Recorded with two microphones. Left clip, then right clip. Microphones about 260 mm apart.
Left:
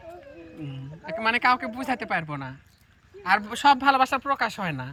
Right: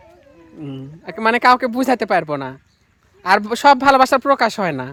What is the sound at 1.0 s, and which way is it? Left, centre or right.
Speech, centre.